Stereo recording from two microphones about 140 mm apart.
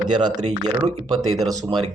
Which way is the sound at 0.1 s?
30° right (ahead or behind).